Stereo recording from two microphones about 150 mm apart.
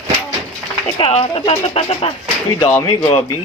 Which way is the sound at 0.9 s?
35° left (ahead or behind).